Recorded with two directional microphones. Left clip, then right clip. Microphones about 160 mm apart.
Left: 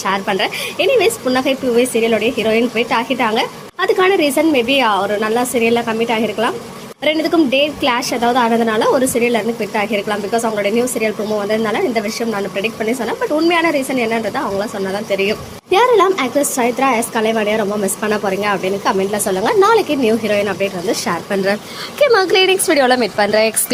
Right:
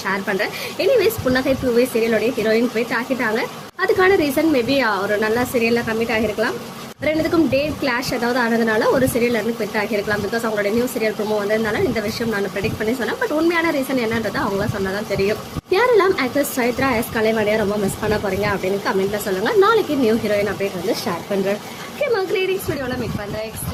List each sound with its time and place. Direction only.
0.0 s a woman's voice: 20° left (ahead or behind)
13.5 s a woman's voice: 15° left (ahead or behind)
22.0 s speech: 35° left (ahead or behind)